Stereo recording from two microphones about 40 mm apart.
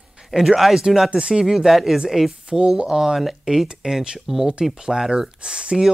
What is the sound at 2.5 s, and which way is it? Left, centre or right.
Speech, right.